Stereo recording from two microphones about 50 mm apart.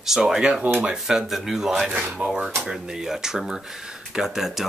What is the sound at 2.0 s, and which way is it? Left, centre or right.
Speech, right.